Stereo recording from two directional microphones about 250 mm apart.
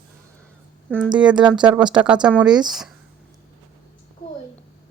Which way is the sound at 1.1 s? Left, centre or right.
Centre.